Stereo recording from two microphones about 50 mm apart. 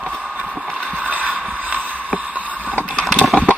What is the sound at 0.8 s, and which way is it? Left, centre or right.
Boat, right.